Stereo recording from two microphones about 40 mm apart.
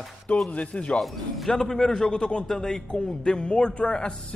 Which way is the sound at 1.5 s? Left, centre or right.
Centre.